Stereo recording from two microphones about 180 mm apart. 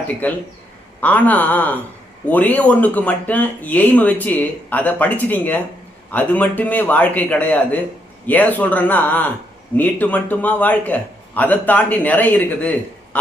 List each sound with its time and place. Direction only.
0.2 s speech: 10° left (ahead or behind)